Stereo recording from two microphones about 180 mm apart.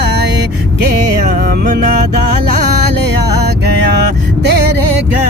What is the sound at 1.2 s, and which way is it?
Music, 45° right (ahead or behind).